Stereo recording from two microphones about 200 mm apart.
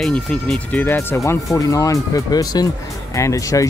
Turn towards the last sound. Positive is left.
turn(degrees=15)  # may be behind; listen again after turning